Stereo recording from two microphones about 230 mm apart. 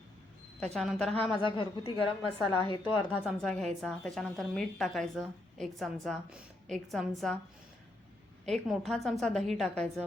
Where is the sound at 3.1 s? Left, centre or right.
Centre.